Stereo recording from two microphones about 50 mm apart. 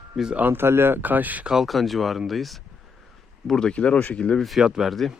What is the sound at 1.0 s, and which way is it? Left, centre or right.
Speech, right.